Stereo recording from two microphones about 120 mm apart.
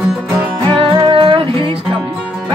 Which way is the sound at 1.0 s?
45° right (ahead or behind).